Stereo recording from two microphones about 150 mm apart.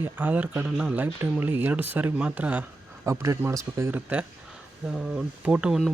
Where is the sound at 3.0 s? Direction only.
20° right (ahead or behind).